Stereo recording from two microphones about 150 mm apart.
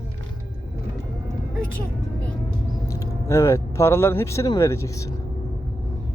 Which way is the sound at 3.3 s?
20° left (ahead or behind).